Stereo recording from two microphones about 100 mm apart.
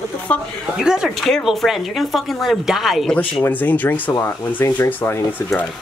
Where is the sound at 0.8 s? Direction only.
5° right (ahead or behind).